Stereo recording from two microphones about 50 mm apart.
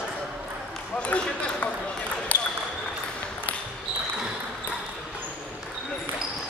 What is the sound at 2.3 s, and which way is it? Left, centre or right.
Basketball bounce, left.